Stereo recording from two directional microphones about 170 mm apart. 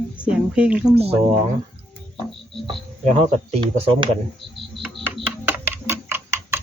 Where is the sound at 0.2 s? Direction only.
5° right (ahead or behind).